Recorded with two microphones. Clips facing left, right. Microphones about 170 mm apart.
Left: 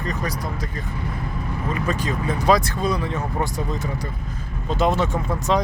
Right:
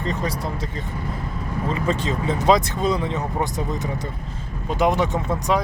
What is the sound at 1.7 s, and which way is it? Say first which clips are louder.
Speech: right 1 dB; 25° right (ahead or behind).